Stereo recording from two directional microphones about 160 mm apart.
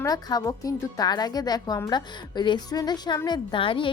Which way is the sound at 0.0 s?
25° left (ahead or behind).